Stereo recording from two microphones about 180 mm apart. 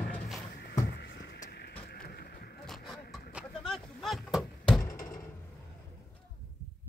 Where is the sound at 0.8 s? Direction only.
65° left (ahead or behind).